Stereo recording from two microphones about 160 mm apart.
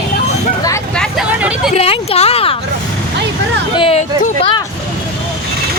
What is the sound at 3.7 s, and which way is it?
Speech, 35° left (ahead or behind).